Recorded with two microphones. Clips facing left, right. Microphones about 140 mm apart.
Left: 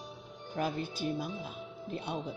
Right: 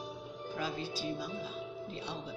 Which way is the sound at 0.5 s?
55° left (ahead or behind).